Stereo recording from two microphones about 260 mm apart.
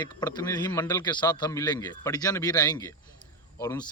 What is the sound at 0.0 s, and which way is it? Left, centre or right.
Speech, centre.